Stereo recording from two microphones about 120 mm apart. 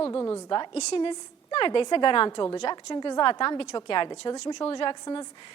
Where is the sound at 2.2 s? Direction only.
35° left (ahead or behind).